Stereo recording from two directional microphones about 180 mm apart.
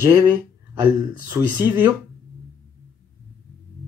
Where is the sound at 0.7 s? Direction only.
10° right (ahead or behind).